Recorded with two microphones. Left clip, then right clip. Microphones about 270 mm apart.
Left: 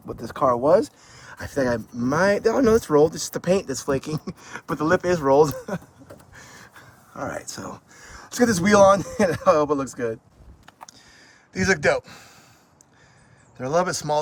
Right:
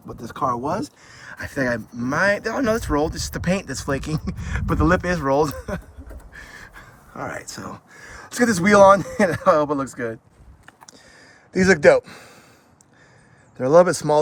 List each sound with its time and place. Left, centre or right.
0.1 s speech: right
1.0 s speech: centre
10.7 s a sound: centre
13.6 s speech: centre